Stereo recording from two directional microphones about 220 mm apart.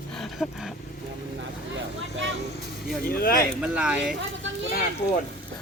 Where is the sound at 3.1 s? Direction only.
40° left (ahead or behind).